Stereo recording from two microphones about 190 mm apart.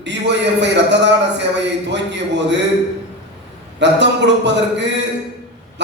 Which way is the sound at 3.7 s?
65° right (ahead or behind).